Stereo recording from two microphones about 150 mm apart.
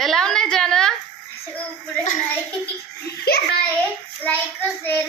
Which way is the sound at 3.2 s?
90° left.